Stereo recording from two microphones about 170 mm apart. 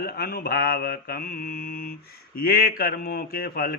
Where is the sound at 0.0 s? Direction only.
65° left (ahead or behind).